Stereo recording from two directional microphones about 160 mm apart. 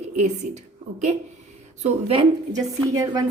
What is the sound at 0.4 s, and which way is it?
Speech, 55° right (ahead or behind).